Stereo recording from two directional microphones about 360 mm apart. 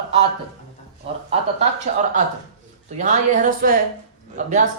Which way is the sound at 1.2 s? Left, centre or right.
Centre.